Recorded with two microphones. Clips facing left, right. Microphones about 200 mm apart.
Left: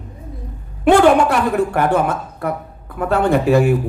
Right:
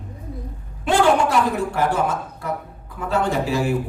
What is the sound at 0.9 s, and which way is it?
Speech, 60° left (ahead or behind).